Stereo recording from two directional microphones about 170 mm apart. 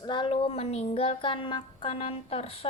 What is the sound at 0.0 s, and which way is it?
Speech, 25° left (ahead or behind).